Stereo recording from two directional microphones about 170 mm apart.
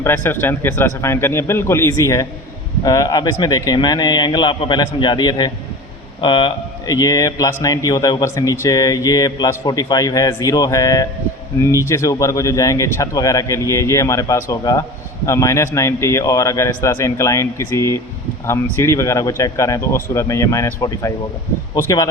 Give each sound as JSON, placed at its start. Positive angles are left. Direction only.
{"t": 0.0, "sound": "a man's voice", "side_deg": 15}